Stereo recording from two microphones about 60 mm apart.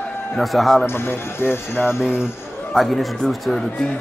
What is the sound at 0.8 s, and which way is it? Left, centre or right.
Speech, left.